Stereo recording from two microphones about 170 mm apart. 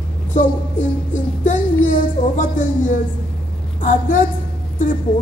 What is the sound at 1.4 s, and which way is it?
Speech, 50° left (ahead or behind).